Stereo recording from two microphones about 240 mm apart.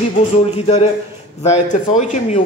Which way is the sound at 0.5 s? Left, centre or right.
Left.